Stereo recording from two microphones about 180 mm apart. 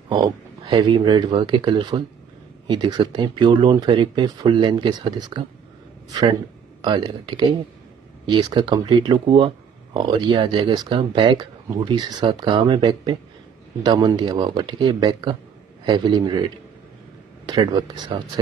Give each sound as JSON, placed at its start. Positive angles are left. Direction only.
{"t": 0.1, "sound": "speech", "side_deg": -25}
{"t": 6.8, "sound": "speech", "side_deg": -25}
{"t": 17.5, "sound": "speech", "side_deg": -25}